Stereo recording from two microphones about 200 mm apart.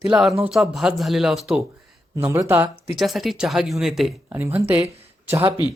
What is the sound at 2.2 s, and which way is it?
Speech, 15° right (ahead or behind).